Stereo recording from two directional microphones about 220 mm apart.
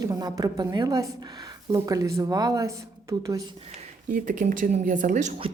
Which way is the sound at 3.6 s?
35° right (ahead or behind).